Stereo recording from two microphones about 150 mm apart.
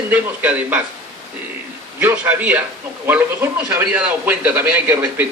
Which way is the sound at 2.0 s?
10° right (ahead or behind).